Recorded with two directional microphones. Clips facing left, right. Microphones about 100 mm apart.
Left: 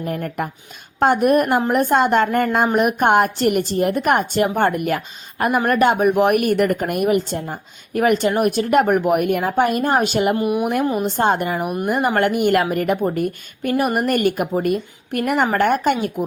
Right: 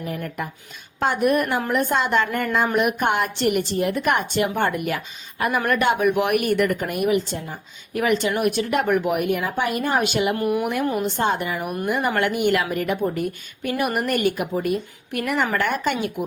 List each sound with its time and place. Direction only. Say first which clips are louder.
0.0 s speech: left 5 dB; 50° left (ahead or behind)
10.3 s speech: left 3 dB; 20° left (ahead or behind)
11.0 s speech: left 4 dB; 50° left (ahead or behind)
11.6 s speech: left 4 dB; 20° left (ahead or behind)
11.9 s speech: left 4 dB; 45° left (ahead or behind)